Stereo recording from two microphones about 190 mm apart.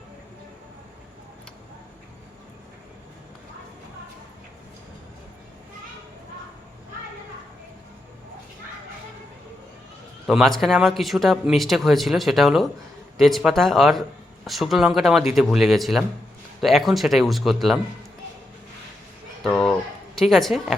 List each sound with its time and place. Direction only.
10.2 s speech: centre (ahead or behind)
19.4 s a sound: centre (ahead or behind)
20.1 s speech: centre (ahead or behind)